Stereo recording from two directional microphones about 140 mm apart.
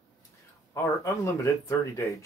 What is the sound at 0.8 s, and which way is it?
Speech, 20° left (ahead or behind).